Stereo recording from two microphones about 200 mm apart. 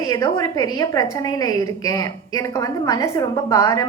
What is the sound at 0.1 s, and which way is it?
A woman's voice, 15° left (ahead or behind).